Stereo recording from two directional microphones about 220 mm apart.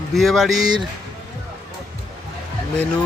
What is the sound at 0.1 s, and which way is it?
Speech, centre (ahead or behind).